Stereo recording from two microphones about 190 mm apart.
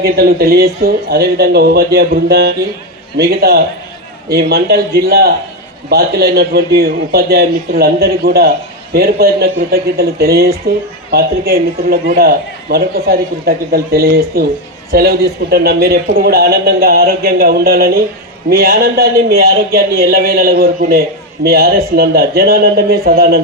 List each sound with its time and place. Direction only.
0.0 s a man's voice: 55° right (ahead or behind)